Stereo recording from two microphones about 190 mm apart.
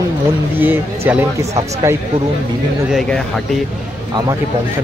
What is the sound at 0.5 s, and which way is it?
Speech, 10° right (ahead or behind).